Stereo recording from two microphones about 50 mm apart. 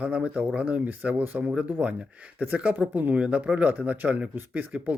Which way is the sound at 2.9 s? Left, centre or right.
Right.